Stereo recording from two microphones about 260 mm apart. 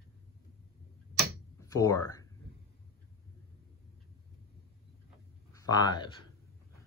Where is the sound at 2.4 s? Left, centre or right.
Left.